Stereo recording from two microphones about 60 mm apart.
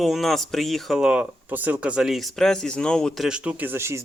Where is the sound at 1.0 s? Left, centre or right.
Centre.